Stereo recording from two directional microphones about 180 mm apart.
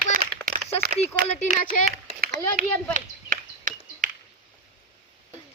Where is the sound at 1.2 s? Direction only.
40° left (ahead or behind).